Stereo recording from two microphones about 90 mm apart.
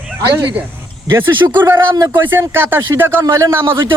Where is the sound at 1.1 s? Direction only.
25° right (ahead or behind).